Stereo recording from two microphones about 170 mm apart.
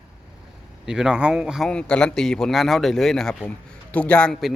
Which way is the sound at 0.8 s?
5° right (ahead or behind).